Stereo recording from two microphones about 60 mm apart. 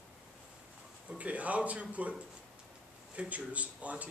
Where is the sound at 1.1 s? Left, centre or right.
Right.